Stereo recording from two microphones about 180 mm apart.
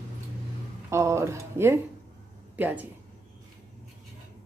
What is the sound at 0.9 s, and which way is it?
Speech, 15° right (ahead or behind).